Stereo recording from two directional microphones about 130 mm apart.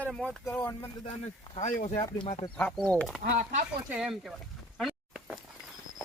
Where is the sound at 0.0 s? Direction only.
5° left (ahead or behind).